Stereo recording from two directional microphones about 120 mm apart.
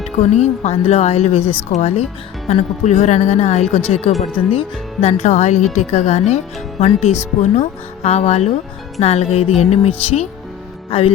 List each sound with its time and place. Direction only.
0.2 s speech: 70° left (ahead or behind)
10.9 s speech: 55° left (ahead or behind)